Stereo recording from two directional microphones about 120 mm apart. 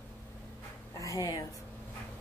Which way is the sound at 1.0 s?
30° left (ahead or behind).